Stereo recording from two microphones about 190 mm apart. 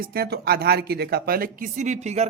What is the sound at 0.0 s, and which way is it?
Speech, 55° right (ahead or behind).